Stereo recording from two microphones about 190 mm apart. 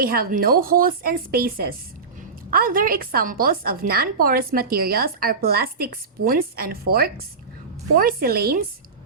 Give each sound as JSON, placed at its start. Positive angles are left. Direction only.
{"t": 0.0, "sound": "a woman's voice", "side_deg": -50}